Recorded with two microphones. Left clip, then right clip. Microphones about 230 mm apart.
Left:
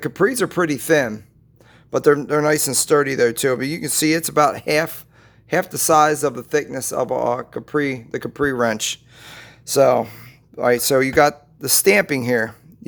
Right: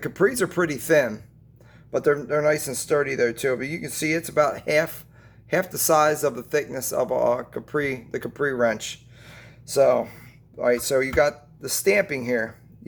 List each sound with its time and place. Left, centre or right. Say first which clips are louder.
0.0 s speech: left 3 dB; left